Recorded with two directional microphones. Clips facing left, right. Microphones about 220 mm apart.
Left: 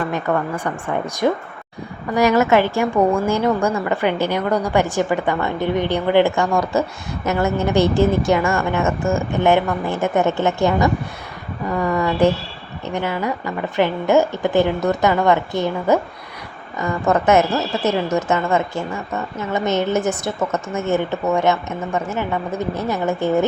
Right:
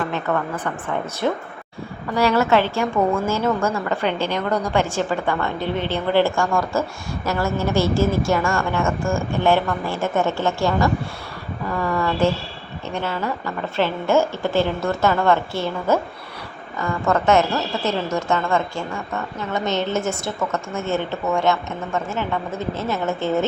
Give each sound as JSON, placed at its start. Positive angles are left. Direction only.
{"t": 0.1, "sound": "a woman's voice", "side_deg": 10}